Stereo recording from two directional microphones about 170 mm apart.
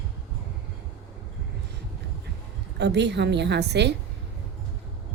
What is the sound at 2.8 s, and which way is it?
A woman's voice, 85° right.